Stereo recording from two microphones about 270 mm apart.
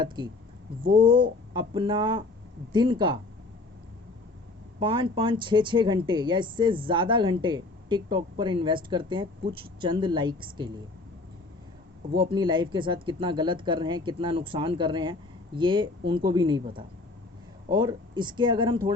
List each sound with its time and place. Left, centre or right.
1.1 s speech: centre
4.8 s speech: centre
12.1 s speech: centre